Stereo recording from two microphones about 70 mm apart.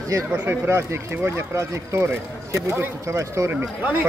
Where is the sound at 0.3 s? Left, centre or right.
Right.